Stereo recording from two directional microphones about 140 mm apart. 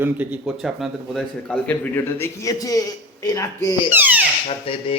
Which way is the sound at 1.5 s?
15° left (ahead or behind).